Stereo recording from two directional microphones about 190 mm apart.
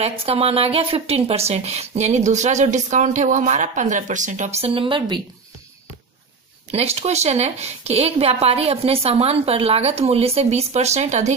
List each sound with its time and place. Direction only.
0.0 s speech: 30° right (ahead or behind)
6.7 s speech: 35° right (ahead or behind)